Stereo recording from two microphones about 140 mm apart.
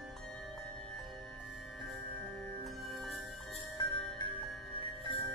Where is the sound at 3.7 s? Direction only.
35° left (ahead or behind).